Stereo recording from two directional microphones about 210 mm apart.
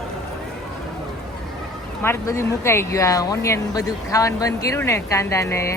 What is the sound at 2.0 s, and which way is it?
Speech, 15° left (ahead or behind).